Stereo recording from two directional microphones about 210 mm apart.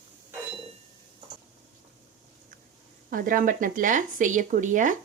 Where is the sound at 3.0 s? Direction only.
40° right (ahead or behind).